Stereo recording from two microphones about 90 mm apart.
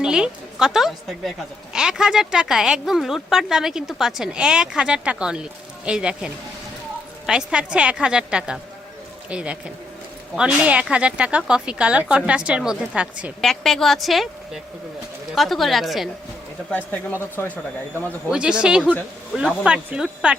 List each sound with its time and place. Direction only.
0.0 s a woman's voice: 10° right (ahead or behind)
13.4 s a woman's voice: 5° left (ahead or behind)
17.1 s speech: 25° left (ahead or behind)
18.3 s speech: 10° right (ahead or behind)